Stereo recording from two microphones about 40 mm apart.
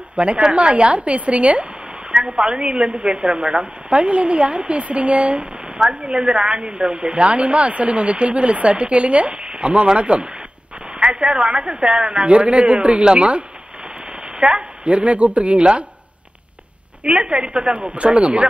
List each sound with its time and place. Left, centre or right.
0.1 s a woman's voice: right
5.8 s a woman's voice: centre
13.0 s speech: right
14.4 s a woman's voice: right
17.0 s a woman's voice: right